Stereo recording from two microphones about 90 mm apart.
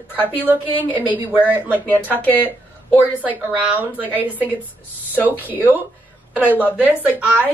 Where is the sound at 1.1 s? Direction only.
15° right (ahead or behind).